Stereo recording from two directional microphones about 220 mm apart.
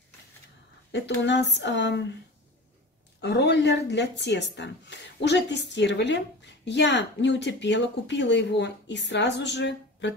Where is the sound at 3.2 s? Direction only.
50° left (ahead or behind).